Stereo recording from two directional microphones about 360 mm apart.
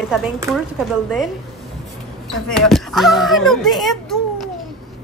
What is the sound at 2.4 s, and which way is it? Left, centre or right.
A child's voice, centre.